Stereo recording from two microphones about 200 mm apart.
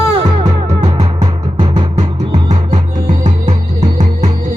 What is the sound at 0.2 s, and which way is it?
Music, 30° right (ahead or behind).